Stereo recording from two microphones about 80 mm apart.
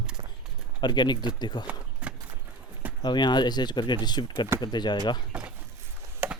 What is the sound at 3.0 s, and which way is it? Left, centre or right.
Speech, left.